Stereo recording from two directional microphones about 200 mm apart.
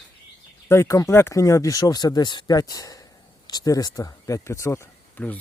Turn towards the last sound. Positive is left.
turn(degrees=10)  # may be behind; listen again after turning